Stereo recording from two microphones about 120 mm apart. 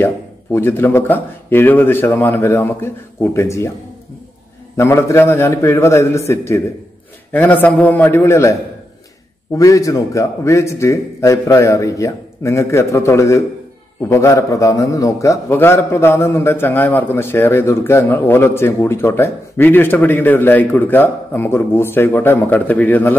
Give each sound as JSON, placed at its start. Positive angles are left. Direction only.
{"t": 0.0, "sound": "speech", "side_deg": 20}
{"t": 4.7, "sound": "a man's voice", "side_deg": 20}